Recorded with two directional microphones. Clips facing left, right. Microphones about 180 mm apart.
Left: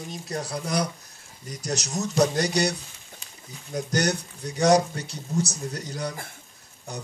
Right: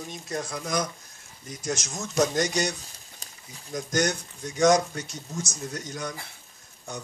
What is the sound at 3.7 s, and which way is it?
Speech, 35° left (ahead or behind).